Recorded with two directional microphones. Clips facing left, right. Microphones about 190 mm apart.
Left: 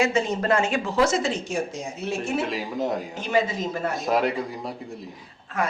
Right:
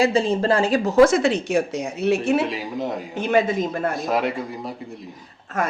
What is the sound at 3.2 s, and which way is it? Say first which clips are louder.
Speech: right 6 dB; 55° right (ahead or behind).